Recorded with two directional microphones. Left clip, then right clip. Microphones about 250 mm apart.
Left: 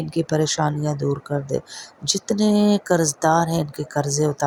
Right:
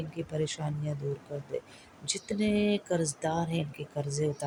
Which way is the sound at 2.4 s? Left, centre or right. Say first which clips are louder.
Left 9 dB; left.